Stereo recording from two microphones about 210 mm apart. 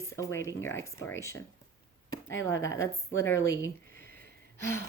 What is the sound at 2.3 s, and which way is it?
Speech, 65° left (ahead or behind).